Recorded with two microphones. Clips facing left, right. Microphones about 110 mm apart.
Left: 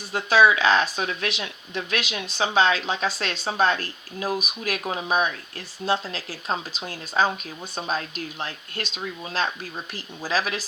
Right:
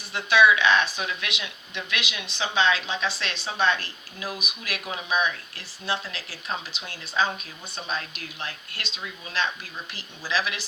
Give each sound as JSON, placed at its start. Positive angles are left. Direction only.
{"t": 0.1, "sound": "speech", "side_deg": 40}